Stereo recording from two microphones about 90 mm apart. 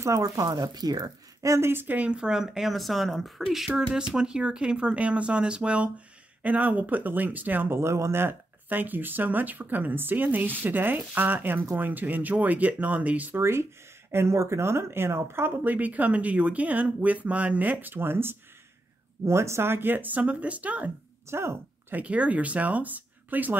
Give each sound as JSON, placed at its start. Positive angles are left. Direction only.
{"t": 0.0, "sound": "speech", "side_deg": -35}
{"t": 0.5, "sound": "speech", "side_deg": -45}
{"t": 13.4, "sound": "speech", "side_deg": -30}
{"t": 21.3, "sound": "speech", "side_deg": -30}
{"t": 22.0, "sound": "speech", "side_deg": -15}